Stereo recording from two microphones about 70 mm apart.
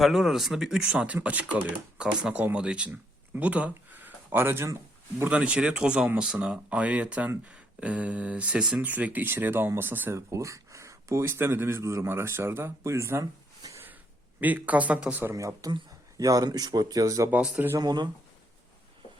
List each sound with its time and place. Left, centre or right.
0.0 s speech: centre; by 4.7 s right
5.3 s speech: centre; by 10.2 s right
10.2 s speech: right
11.8 s speech: right
12.0 s speech: right
13.6 s a sound: right
14.4 s speech: right
15.3 s speech: right
16.5 s speech: right
17.7 s speech: right